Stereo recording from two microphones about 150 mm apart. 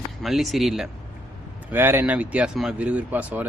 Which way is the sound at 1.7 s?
15° right (ahead or behind).